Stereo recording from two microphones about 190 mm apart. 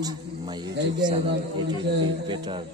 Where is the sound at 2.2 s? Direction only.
25° right (ahead or behind).